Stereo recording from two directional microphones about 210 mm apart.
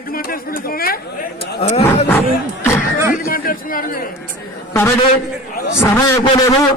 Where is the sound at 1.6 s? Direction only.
30° left (ahead or behind).